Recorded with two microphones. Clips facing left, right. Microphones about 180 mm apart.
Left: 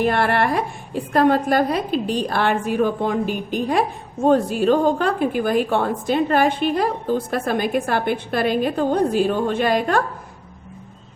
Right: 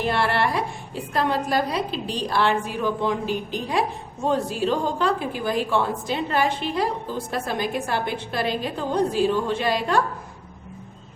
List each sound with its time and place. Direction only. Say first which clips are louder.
0.0 s a woman's voice: left 4 dB; 55° left (ahead or behind)